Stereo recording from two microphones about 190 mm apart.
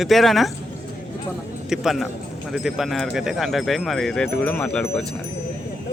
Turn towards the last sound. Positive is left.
turn(degrees=5)  # may be behind; listen again after turning